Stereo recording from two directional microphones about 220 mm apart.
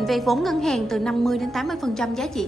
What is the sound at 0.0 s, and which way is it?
A woman's voice, centre (ahead or behind).